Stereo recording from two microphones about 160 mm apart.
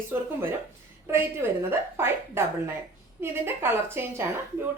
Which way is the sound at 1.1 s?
15° right (ahead or behind).